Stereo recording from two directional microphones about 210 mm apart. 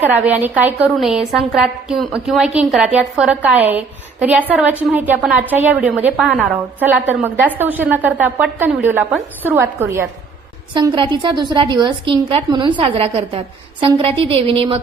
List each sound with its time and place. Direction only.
0.0 s a woman's voice: 10° right (ahead or behind)
10.8 s a woman's voice: 20° right (ahead or behind)